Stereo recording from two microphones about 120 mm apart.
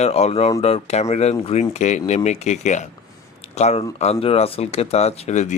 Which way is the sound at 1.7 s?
75° left (ahead or behind).